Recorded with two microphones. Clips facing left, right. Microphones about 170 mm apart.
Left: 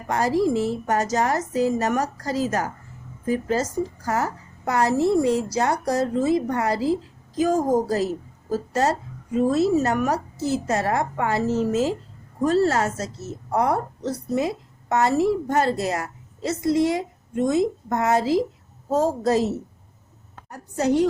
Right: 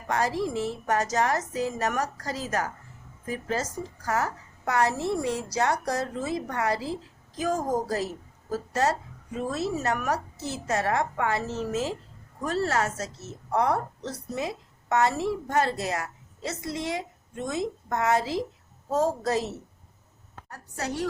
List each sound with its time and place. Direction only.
0.1 s a woman's voice: 35° left (ahead or behind)
20.5 s a woman's voice: 20° left (ahead or behind)